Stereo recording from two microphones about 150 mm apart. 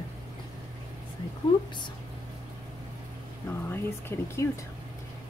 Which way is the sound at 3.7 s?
15° left (ahead or behind).